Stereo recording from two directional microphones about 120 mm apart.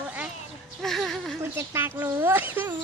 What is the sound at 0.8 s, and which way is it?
Speech, centre (ahead or behind).